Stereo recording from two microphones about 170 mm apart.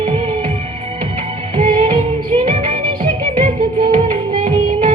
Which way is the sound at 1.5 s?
35° right (ahead or behind).